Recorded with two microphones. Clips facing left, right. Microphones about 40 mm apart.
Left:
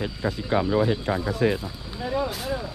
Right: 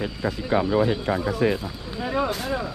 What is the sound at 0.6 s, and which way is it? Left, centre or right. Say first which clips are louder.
Speech: right 1 dB; right.